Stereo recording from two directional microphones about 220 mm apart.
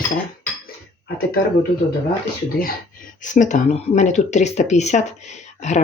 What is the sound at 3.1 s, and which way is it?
Speech, 35° left (ahead or behind).